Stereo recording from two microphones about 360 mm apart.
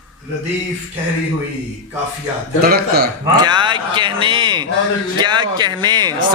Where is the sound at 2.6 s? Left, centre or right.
Right.